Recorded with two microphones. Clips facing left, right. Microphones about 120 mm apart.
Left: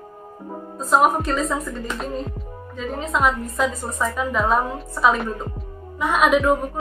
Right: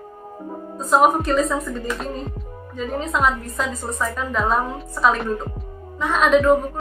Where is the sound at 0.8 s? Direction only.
Centre (ahead or behind).